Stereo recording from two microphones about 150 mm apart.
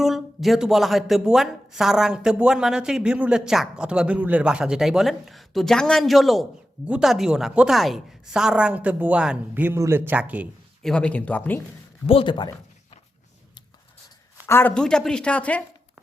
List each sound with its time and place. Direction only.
0.0 s speech: centre (ahead or behind)
10.8 s speech: 5° left (ahead or behind)
12.0 s speech: 35° left (ahead or behind)
14.4 s speech: 15° left (ahead or behind)